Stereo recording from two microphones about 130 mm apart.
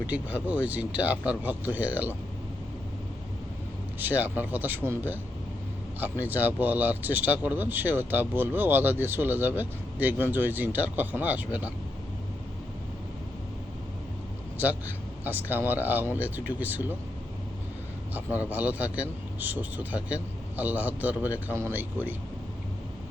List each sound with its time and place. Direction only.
0.1 s speech: 10° right (ahead or behind)
4.0 s speech: 15° right (ahead or behind)
15.2 s speech: 15° right (ahead or behind)
18.1 s speech: 15° right (ahead or behind)